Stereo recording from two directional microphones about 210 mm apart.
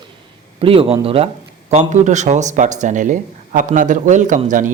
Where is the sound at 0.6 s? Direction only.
25° right (ahead or behind).